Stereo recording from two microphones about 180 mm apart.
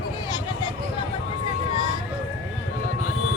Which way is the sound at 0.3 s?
25° left (ahead or behind).